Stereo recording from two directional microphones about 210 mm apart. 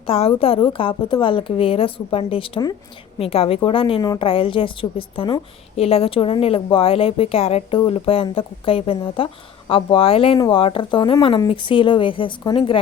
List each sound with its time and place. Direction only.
0.1 s a woman's voice: 25° left (ahead or behind)